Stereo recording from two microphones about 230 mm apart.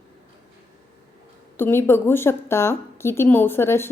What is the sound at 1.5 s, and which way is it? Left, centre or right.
A woman's voice, centre.